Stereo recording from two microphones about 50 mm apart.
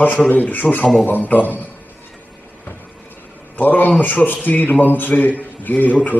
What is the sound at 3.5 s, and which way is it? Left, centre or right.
A man's voice, left.